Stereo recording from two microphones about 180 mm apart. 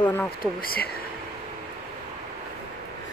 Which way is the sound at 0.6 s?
55° left (ahead or behind).